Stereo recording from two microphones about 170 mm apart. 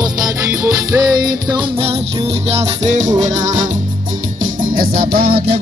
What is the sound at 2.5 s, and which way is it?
Music, 40° right (ahead or behind).